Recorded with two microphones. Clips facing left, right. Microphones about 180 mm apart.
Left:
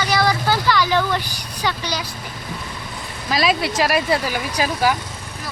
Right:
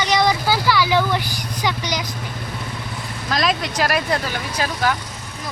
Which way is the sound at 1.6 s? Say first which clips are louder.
Even; 15° right (ahead or behind).